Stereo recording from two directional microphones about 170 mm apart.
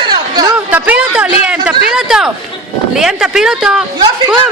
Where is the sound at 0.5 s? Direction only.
10° right (ahead or behind).